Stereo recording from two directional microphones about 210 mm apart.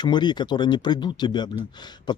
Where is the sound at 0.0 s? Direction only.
20° left (ahead or behind).